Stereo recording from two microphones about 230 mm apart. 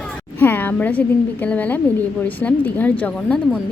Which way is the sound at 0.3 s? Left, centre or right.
Centre.